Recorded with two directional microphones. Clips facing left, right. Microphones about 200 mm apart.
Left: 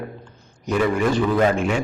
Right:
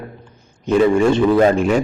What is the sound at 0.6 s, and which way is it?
A man's voice, 25° right (ahead or behind).